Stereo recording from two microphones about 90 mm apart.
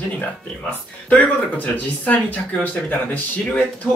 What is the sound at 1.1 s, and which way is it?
Speech, 20° left (ahead or behind).